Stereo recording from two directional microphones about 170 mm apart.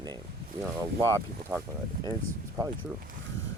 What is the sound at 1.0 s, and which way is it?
Speech, 15° right (ahead or behind).